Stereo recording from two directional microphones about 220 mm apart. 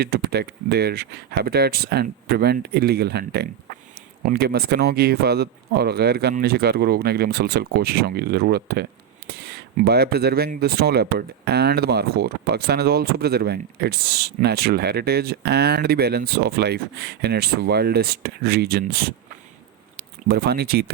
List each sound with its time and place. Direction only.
0.0 s speech: 45° right (ahead or behind)